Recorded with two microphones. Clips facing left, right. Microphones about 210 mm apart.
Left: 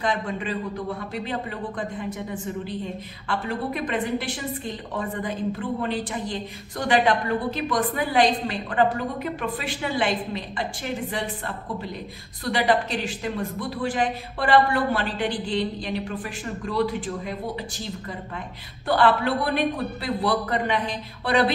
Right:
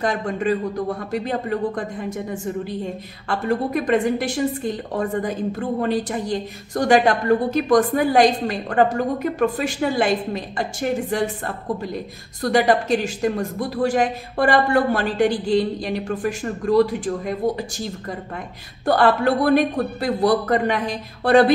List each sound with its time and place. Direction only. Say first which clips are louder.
0.0 s a woman's voice: right 5 dB; 45° right (ahead or behind)
18.9 s a woman's voice: right 4 dB; 45° right (ahead or behind)